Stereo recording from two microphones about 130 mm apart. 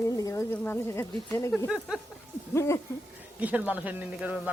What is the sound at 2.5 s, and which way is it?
Speech, 20° left (ahead or behind).